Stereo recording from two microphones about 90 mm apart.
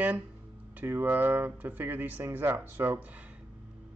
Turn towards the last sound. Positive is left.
turn(degrees=-25)  # may be behind; listen again after turning